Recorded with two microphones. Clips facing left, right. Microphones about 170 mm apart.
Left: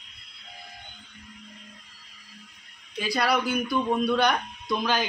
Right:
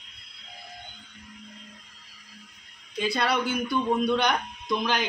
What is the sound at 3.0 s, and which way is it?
A man's voice, 25° right (ahead or behind).